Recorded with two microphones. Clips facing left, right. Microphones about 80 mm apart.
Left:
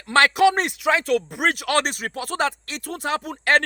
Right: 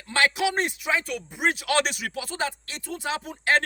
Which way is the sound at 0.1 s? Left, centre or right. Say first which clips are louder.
Left 7 dB; left.